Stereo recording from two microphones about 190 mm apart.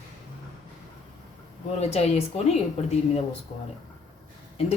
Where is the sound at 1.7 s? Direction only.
35° left (ahead or behind).